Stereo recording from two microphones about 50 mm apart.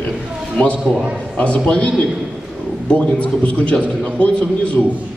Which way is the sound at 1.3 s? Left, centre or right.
Left.